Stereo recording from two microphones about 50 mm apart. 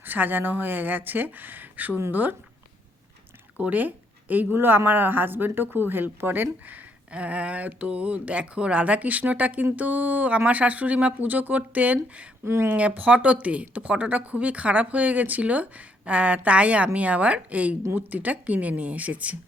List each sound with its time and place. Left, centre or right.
0.0 s speech: right
3.7 s speech: right
4.5 s a woman's voice: right
7.1 s speech: right